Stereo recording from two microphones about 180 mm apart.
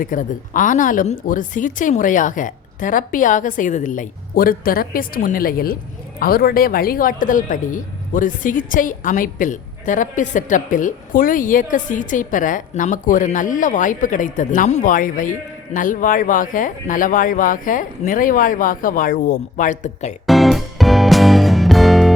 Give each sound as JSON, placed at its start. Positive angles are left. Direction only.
{"t": 0.0, "sound": "speech", "side_deg": 50}
{"t": 20.2, "sound": "music", "side_deg": 0}